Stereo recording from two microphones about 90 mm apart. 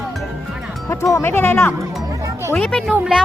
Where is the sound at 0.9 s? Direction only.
30° left (ahead or behind).